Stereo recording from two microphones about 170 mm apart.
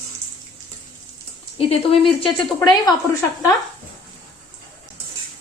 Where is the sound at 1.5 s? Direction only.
35° left (ahead or behind).